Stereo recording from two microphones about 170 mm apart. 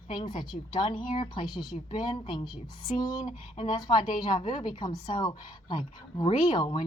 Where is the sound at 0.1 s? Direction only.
25° left (ahead or behind).